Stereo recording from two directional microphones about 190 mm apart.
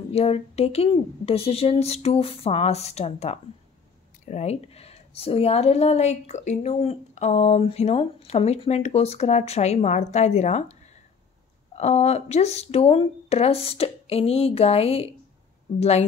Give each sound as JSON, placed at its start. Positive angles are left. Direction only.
{"t": 0.1, "sound": "a woman's voice", "side_deg": 30}
{"t": 11.7, "sound": "a woman's voice", "side_deg": 35}